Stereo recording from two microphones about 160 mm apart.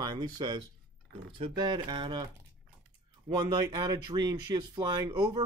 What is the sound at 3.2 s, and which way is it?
Speech, 30° right (ahead or behind).